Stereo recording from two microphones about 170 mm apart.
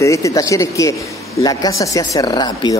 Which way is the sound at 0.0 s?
20° left (ahead or behind).